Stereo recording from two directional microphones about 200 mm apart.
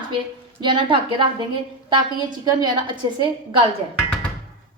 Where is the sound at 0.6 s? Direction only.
25° right (ahead or behind).